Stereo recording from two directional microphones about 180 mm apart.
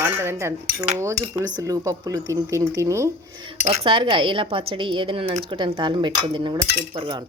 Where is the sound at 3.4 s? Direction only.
35° right (ahead or behind).